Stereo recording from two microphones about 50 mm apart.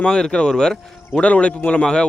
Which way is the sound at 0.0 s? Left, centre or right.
Centre.